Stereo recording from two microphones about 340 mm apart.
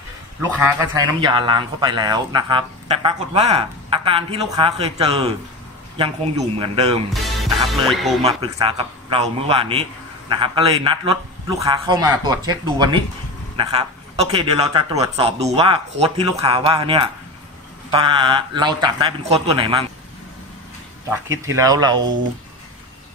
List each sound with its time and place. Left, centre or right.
0.4 s a man's voice: centre
7.1 s music: centre
7.8 s speech: centre
8.2 s a man's voice: centre
14.3 s a man's voice: centre
21.1 s a man's voice: centre